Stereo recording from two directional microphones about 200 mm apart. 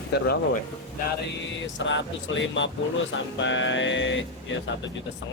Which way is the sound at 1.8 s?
65° left (ahead or behind).